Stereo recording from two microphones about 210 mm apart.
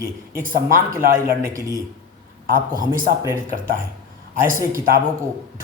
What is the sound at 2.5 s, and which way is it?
Speech, 40° right (ahead or behind).